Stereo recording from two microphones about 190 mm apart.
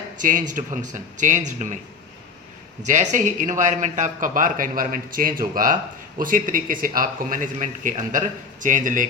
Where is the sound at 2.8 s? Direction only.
40° right (ahead or behind).